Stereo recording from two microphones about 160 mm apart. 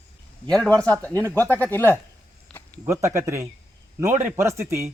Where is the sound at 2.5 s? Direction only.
5° left (ahead or behind).